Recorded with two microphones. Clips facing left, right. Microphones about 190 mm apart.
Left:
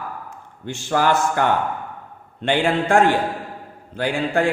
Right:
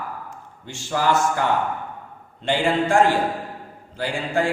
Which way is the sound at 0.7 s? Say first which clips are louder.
Left 2 dB; 60° left (ahead or behind).